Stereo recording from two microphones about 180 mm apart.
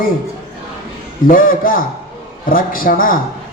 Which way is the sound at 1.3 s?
50° left (ahead or behind).